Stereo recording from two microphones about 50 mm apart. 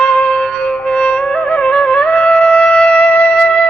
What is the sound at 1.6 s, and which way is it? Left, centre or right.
Music, left.